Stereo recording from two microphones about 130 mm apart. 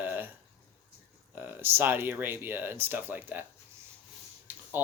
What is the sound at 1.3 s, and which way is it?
Speech, 15° right (ahead or behind).